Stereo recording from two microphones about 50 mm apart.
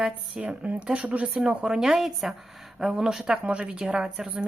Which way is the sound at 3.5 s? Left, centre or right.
Right.